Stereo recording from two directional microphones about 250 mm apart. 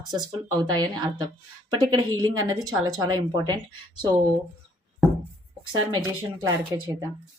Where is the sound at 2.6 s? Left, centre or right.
Centre.